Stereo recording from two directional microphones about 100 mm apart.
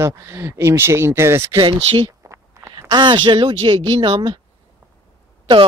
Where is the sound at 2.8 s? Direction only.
50° right (ahead or behind).